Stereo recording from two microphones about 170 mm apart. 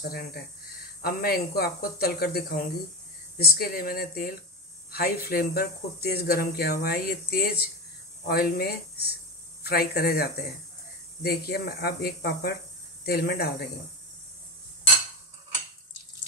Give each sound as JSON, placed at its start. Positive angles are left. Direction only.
{"t": 0.1, "sound": "speech", "side_deg": 65}